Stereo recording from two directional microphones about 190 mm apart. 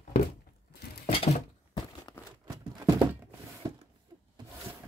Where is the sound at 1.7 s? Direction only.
20° left (ahead or behind).